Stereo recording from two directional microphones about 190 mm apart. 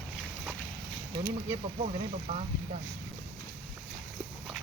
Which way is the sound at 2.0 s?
35° right (ahead or behind).